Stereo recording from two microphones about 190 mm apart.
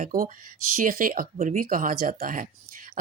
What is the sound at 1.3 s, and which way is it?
Speech, 35° right (ahead or behind).